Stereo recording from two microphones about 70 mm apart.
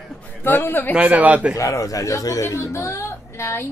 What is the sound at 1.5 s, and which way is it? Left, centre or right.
Speech, left.